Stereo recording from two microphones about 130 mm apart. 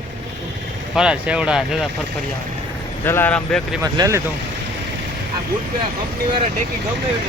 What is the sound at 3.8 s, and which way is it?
Speech, 25° right (ahead or behind).